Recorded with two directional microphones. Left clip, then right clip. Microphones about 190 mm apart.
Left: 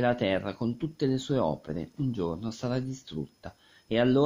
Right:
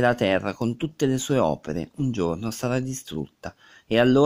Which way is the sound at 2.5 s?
20° right (ahead or behind).